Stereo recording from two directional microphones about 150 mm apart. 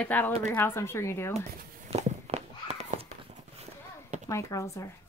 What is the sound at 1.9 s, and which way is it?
Walk, 45° right (ahead or behind).